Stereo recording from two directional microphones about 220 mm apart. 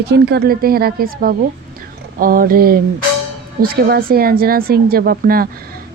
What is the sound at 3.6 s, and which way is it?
Speech, 40° right (ahead or behind).